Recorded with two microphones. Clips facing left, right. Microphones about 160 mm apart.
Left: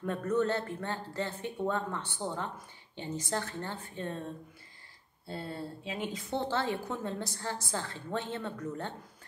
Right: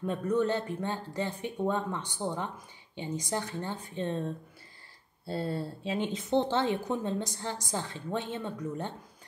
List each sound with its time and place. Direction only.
0.0 s speech: 15° right (ahead or behind)
5.3 s speech: 30° right (ahead or behind); by 8.9 s 15° right (ahead or behind)